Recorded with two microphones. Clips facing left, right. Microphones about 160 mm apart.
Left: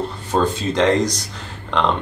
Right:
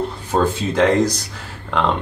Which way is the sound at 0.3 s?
10° right (ahead or behind).